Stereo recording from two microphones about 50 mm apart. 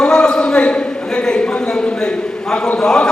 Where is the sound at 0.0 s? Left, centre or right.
Centre.